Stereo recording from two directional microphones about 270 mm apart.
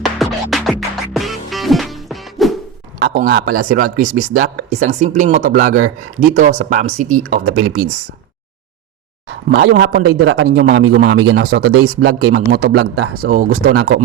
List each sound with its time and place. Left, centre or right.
0.0 s music: centre
3.0 s speech: right
9.5 s speech: right
10.2 s speech: right
12.0 s speech: right